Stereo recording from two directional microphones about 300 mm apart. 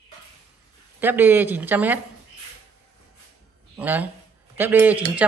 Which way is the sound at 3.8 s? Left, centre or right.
Centre.